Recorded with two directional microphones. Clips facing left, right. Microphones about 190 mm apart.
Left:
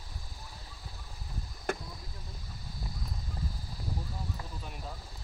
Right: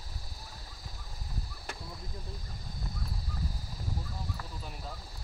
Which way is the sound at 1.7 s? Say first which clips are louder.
Left 10 dB; 55° left (ahead or behind).